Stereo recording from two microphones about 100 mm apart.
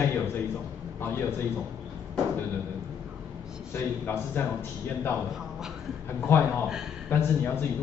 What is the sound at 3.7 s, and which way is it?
Speech, 25° left (ahead or behind).